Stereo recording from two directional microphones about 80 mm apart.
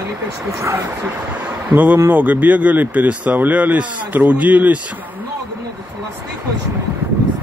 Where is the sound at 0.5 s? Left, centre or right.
Right.